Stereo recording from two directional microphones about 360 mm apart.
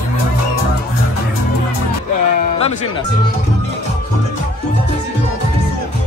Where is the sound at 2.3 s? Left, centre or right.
Centre.